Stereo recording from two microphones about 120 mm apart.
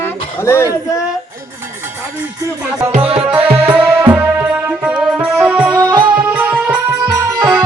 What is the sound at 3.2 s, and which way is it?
Music, 10° right (ahead or behind).